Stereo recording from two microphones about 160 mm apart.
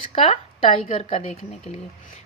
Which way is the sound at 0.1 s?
35° left (ahead or behind).